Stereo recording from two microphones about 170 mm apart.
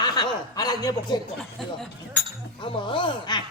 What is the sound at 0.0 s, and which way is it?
Speech, 25° left (ahead or behind).